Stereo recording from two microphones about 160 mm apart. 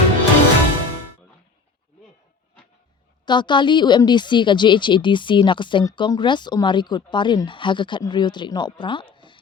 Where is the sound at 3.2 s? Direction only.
30° left (ahead or behind).